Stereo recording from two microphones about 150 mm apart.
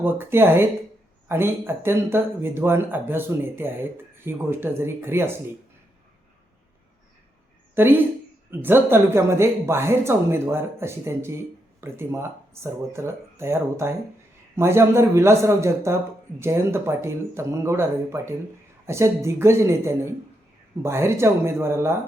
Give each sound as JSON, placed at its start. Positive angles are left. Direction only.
{"t": 0.0, "sound": "speech", "side_deg": -15}
{"t": 7.8, "sound": "speech", "side_deg": -15}